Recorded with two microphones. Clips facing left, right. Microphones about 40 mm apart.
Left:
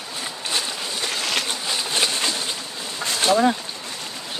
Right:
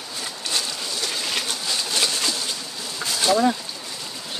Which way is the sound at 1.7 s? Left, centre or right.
Left.